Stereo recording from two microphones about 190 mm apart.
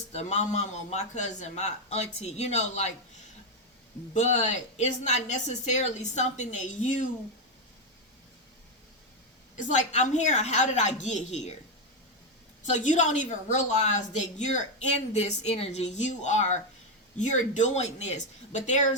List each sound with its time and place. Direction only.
0.1 s a woman's voice: 35° left (ahead or behind)
4.1 s a woman's voice: 35° left (ahead or behind)
9.6 s a woman's voice: 40° left (ahead or behind)
12.6 s a woman's voice: 40° left (ahead or behind)